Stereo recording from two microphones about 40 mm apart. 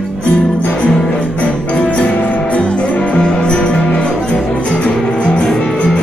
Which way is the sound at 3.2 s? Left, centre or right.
Left.